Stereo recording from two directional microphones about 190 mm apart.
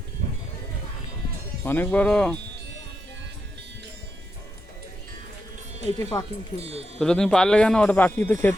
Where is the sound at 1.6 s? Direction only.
10° left (ahead or behind).